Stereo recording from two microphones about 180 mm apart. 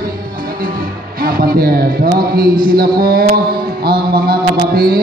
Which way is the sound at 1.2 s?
55° right (ahead or behind).